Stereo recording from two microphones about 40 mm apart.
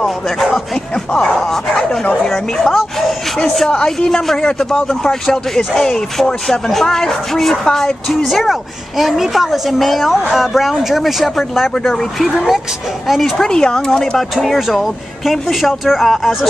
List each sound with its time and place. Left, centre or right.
1.5 s speech: centre
3.7 s speech: centre
13.4 s speech: centre
14.1 s speech: centre